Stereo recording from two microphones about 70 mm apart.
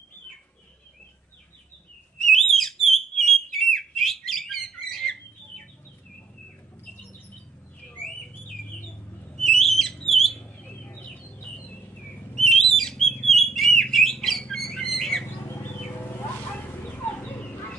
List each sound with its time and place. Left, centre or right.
2.3 s bird: centre
7.9 s bird: centre
9.3 s bird: centre
10.0 s a sound: centre
10.4 s bird: centre
11.1 s a sound: left
12.4 s bird: centre
17.0 s fowl: left